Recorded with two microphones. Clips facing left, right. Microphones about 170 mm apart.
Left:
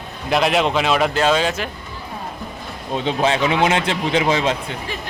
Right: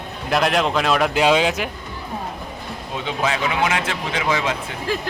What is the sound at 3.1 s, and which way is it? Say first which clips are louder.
Speech: left 4 dB; 25° left (ahead or behind).